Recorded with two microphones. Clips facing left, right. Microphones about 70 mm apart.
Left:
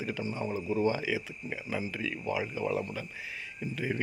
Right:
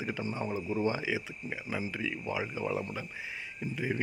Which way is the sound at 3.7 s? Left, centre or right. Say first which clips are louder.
Even; centre.